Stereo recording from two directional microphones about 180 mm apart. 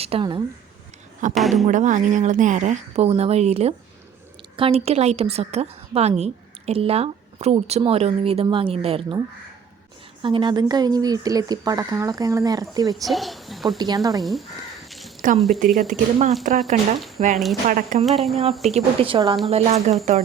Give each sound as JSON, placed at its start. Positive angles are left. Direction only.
{"t": 0.0, "sound": "speech", "side_deg": -30}
{"t": 1.4, "sound": "speech", "side_deg": 0}
{"t": 1.6, "sound": "a woman's voice", "side_deg": -45}
{"t": 10.2, "sound": "speech", "side_deg": -25}
{"t": 13.1, "sound": "speech", "side_deg": 0}
{"t": 13.7, "sound": "speech", "side_deg": -20}
{"t": 14.2, "sound": "speech", "side_deg": 0}
{"t": 14.8, "sound": "a sound", "side_deg": 0}
{"t": 15.4, "sound": "speech", "side_deg": 0}
{"t": 15.9, "sound": "a woman's voice", "side_deg": -40}
{"t": 17.3, "sound": "speech", "side_deg": 0}
{"t": 17.7, "sound": "speech", "side_deg": -55}
{"t": 18.0, "sound": "speech", "side_deg": 0}
{"t": 18.6, "sound": "a woman's voice", "side_deg": -35}